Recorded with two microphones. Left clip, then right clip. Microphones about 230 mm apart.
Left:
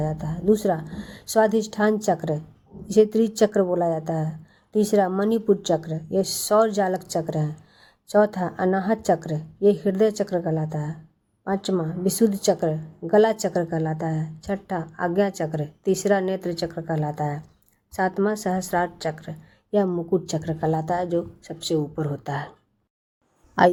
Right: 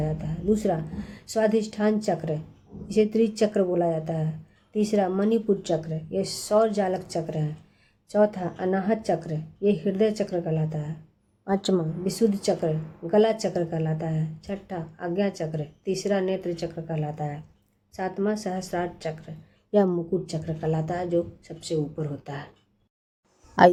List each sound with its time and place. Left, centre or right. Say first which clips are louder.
0.0 s a sound: left 4 dB; left
1.3 s a woman's voice: left 4 dB; left
11.4 s a woman's voice: even; centre
12.5 s a woman's voice: left 3 dB; left
19.7 s a woman's voice: even; centre
20.4 s a woman's voice: left 4 dB; left
23.6 s a woman's voice: right 1 dB; centre